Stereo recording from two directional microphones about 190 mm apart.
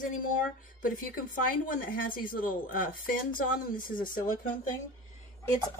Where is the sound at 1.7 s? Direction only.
45° left (ahead or behind).